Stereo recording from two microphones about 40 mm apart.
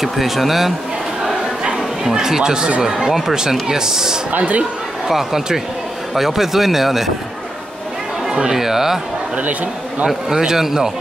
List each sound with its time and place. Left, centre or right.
0.0 s speech: centre
2.1 s speech: centre
4.3 s a man's voice: right
5.0 s speech: centre
8.3 s speech: centre
9.4 s a man's voice: right
10.0 s speech: centre